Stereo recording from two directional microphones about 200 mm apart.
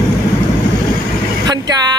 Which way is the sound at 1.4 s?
20° right (ahead or behind).